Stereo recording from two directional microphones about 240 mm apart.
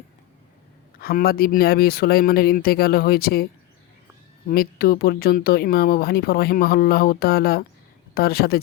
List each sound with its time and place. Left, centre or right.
0.9 s speech: left